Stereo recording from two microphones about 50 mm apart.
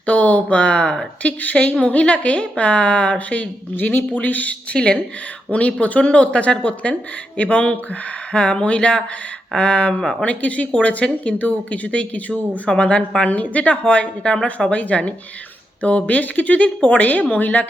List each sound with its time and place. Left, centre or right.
0.0 s a woman's voice: left